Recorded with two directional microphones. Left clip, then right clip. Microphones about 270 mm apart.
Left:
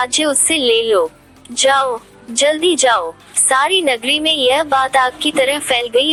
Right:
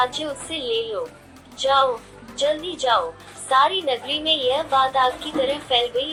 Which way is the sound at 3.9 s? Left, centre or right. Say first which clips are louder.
Left 8 dB; left.